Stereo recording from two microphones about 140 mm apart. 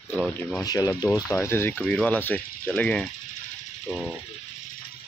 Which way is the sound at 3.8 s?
5° right (ahead or behind).